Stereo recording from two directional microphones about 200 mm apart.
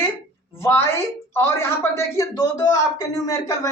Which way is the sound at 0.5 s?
10° left (ahead or behind).